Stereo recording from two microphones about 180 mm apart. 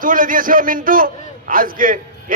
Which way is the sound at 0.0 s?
50° right (ahead or behind).